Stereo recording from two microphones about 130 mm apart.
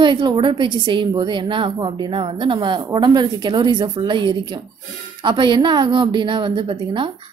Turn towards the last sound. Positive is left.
turn(degrees=-40)  # may be behind; listen again after turning